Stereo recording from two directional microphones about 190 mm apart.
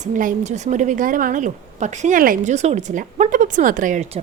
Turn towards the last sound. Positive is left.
turn(degrees=-40)  # may be behind; listen again after turning